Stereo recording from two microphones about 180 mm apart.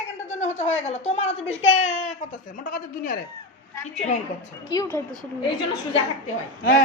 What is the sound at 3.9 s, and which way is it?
Speech, 40° left (ahead or behind).